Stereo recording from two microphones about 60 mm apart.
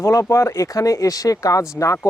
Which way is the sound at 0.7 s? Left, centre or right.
Left.